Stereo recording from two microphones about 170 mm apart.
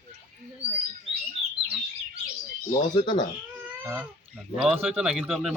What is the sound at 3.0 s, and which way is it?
Speech, 25° left (ahead or behind).